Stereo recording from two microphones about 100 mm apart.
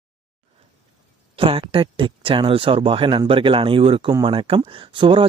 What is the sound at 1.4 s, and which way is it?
Speech, 65° right (ahead or behind).